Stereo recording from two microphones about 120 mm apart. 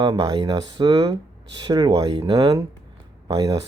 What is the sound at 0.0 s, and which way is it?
Speech, 35° right (ahead or behind).